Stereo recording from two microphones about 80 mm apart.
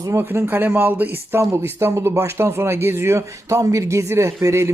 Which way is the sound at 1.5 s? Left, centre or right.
Right.